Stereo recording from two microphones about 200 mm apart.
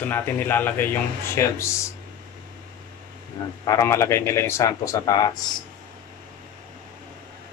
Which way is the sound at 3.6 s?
15° left (ahead or behind).